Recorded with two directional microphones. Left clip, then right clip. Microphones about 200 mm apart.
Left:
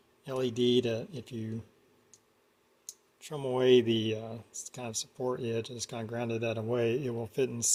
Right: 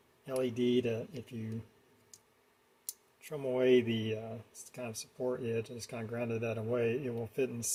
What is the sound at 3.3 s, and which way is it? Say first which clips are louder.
Speech: left 3 dB; 35° left (ahead or behind).